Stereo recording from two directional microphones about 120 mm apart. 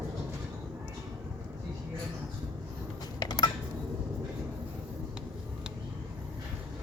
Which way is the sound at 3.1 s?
35° left (ahead or behind).